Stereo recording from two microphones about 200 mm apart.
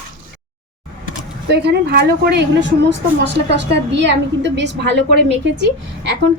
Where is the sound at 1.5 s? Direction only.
55° right (ahead or behind).